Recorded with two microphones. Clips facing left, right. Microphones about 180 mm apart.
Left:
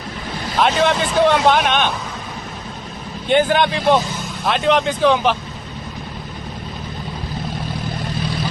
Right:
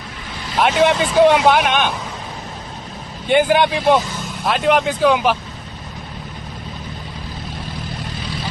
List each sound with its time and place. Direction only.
0.6 s speech: 10° right (ahead or behind)
3.2 s speech: 10° right (ahead or behind)